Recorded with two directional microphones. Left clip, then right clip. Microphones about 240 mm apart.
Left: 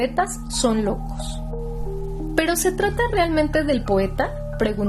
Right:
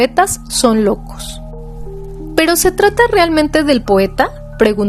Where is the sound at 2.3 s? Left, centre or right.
Right.